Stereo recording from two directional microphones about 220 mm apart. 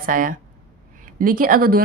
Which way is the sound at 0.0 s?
40° right (ahead or behind).